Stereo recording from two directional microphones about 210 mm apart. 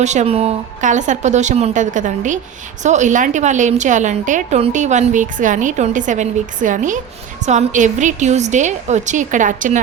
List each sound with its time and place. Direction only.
0.0 s a woman's voice: 35° right (ahead or behind)